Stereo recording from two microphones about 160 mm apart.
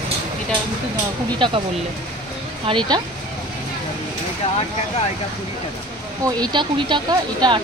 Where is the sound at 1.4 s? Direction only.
30° right (ahead or behind).